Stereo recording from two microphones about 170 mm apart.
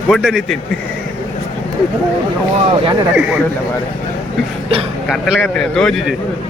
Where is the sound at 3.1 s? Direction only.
5° right (ahead or behind).